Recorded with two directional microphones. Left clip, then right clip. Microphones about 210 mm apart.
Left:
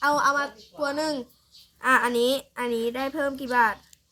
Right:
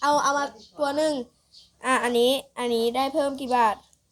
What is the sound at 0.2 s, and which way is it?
A woman's voice, 5° right (ahead or behind).